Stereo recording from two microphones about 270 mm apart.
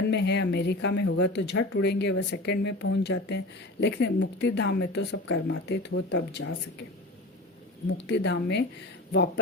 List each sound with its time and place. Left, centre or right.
0.1 s speech: left
7.9 s speech: left